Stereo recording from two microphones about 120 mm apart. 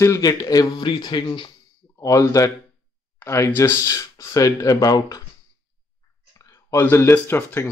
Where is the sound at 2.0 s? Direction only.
25° left (ahead or behind).